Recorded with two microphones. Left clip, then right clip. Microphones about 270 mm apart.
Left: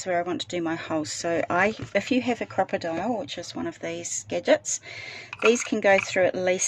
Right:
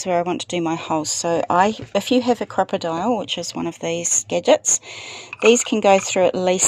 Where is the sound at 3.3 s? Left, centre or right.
Right.